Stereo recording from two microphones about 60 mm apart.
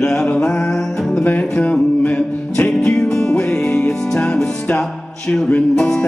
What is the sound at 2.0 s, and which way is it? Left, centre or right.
Music, left.